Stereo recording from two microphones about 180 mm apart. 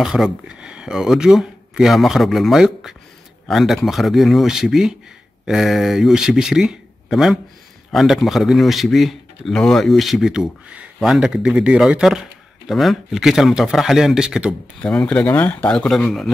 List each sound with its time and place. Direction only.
0.0 s speech: 5° right (ahead or behind)